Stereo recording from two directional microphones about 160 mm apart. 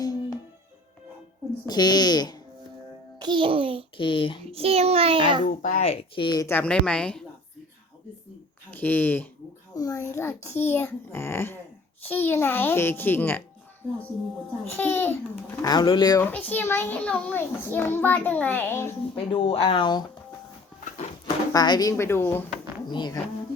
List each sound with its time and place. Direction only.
0.0 s music: 25° left (ahead or behind)
1.6 s a child's voice: 25° left (ahead or behind)
3.2 s a child's voice: 30° right (ahead or behind)
3.9 s speech: 35° left (ahead or behind)
4.5 s a child's voice: 40° right (ahead or behind)
5.6 s speech: 45° left (ahead or behind); by 6.5 s 25° left (ahead or behind)
6.5 s a child's voice: 10° left (ahead or behind)
8.7 s a child's voice: 10° left (ahead or behind)
14.8 s a child's voice: 15° left (ahead or behind)
16.2 s a child's voice: 10° left (ahead or behind)
19.1 s speech: 35° left (ahead or behind)
21.5 s a child's voice: 25° left (ahead or behind)
22.9 s a child's voice: 30° left (ahead or behind)